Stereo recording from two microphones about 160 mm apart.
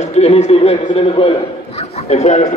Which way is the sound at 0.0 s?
40° left (ahead or behind).